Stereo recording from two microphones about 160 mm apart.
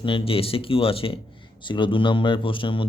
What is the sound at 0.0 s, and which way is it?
A man's voice, 35° left (ahead or behind).